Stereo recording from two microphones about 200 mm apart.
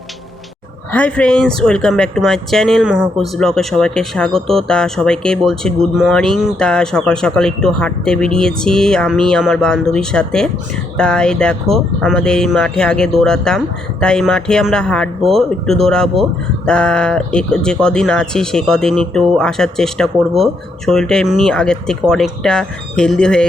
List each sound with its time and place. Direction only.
0.9 s speech: 5° left (ahead or behind)